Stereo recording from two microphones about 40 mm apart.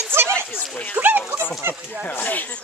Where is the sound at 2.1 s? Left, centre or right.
Left.